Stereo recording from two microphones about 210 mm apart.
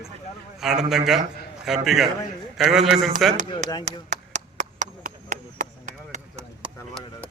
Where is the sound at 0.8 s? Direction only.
Centre (ahead or behind).